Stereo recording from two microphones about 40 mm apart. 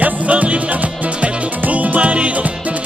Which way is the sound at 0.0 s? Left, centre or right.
Right.